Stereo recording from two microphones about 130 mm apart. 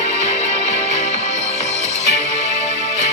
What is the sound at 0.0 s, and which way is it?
Music, 60° left (ahead or behind).